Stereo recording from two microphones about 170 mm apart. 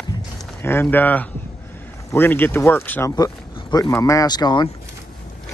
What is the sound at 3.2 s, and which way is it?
Speech, 25° left (ahead or behind).